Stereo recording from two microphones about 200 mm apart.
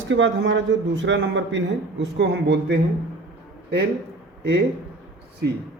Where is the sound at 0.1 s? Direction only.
65° right (ahead or behind).